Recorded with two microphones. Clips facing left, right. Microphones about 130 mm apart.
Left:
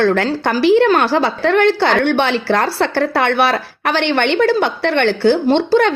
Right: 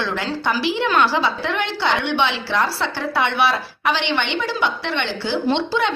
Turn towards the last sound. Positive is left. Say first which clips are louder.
# left 7 dB
turn(degrees=50)  # may be behind; listen again after turning